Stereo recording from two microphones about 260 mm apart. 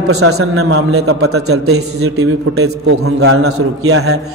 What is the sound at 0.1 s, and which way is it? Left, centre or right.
Speech, right.